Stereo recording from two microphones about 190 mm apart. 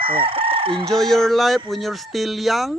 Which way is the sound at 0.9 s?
Centre (ahead or behind).